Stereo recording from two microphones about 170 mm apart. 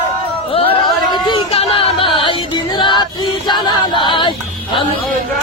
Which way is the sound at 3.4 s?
25° left (ahead or behind).